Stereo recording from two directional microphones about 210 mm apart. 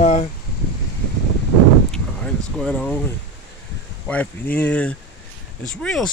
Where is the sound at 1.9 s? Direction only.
5° left (ahead or behind).